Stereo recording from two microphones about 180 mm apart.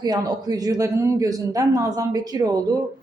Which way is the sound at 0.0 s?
20° right (ahead or behind).